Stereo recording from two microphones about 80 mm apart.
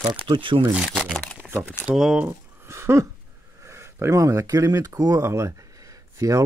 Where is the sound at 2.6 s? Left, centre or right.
Right.